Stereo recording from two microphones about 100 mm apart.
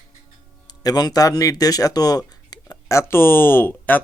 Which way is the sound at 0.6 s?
40° left (ahead or behind).